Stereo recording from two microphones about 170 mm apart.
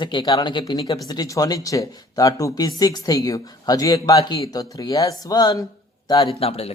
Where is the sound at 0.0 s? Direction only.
25° left (ahead or behind).